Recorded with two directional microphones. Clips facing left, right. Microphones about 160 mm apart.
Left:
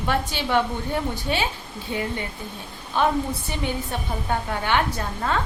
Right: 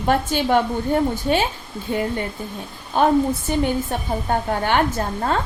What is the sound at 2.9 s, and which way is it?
Speech, 45° right (ahead or behind).